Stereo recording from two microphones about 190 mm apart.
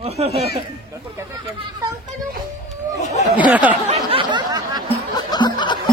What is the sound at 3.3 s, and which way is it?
Speech, 5° right (ahead or behind).